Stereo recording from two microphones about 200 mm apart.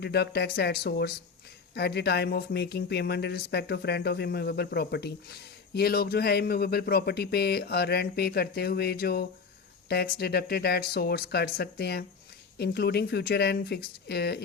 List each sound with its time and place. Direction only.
0.0 s speech: 55° left (ahead or behind)